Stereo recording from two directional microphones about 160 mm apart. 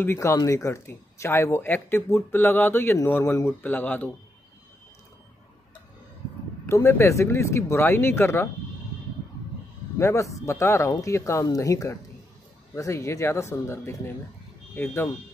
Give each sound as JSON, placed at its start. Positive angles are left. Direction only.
{"t": 0.0, "sound": "speech", "side_deg": 15}
{"t": 6.7, "sound": "speech", "side_deg": 15}
{"t": 9.9, "sound": "speech", "side_deg": 20}